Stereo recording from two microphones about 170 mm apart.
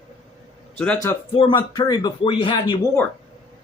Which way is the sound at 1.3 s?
30° left (ahead or behind).